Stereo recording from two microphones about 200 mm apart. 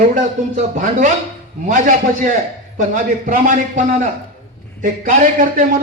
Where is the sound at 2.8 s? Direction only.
40° right (ahead or behind).